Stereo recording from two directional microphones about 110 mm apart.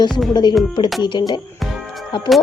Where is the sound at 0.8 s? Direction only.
40° left (ahead or behind).